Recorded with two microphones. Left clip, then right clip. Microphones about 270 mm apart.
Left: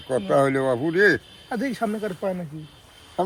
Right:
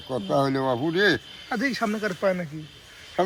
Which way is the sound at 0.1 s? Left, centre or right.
Centre.